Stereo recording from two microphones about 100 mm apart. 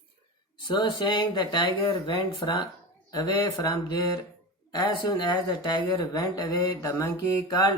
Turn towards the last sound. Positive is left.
turn(degrees=30)  # may be behind; listen again after turning